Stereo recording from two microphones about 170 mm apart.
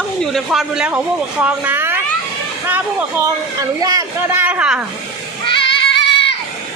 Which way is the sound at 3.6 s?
20° right (ahead or behind).